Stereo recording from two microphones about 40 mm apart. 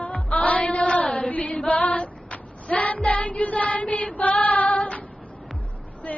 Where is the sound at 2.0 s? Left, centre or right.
Left.